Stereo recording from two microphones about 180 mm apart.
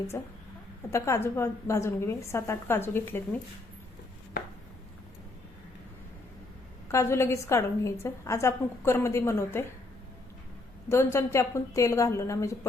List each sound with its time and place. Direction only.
0.1 s a woman's voice: 15° left (ahead or behind)
6.9 s a woman's voice: 15° left (ahead or behind)
10.8 s a woman's voice: 15° left (ahead or behind)